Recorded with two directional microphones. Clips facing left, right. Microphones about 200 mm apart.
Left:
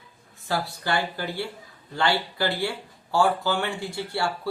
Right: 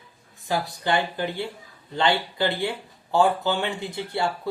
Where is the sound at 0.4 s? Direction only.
15° right (ahead or behind).